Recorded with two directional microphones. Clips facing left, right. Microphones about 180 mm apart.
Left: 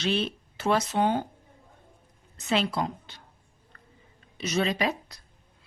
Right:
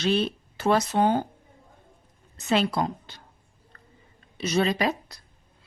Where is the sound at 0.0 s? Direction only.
40° right (ahead or behind).